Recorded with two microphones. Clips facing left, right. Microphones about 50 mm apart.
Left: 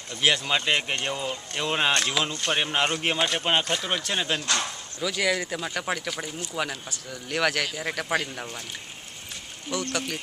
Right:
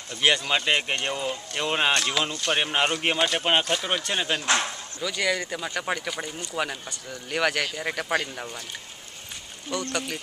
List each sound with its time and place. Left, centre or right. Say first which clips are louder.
0.2 s speech: right 1 dB; centre
4.4 s speech: right 3 dB; right
5.0 s speech: left 1 dB; centre
9.7 s speech: even; centre